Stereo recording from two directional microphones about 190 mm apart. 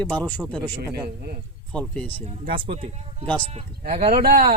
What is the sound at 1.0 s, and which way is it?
Speech, 55° right (ahead or behind).